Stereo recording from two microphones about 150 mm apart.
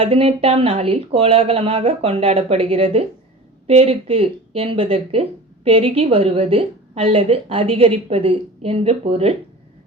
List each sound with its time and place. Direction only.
0.0 s speech: 40° right (ahead or behind)